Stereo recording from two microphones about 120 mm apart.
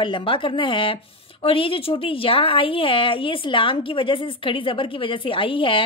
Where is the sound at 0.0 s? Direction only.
45° left (ahead or behind).